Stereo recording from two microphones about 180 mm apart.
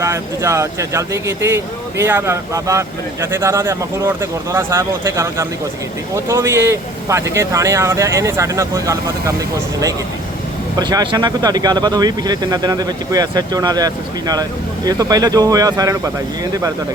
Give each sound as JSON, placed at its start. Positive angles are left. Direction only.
{"t": 0.0, "sound": "speech", "side_deg": -15}
{"t": 10.8, "sound": "speech", "side_deg": -20}